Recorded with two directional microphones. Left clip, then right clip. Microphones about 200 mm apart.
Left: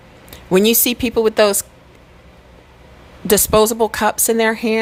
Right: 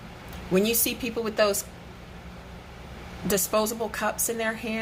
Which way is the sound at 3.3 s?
50° left (ahead or behind).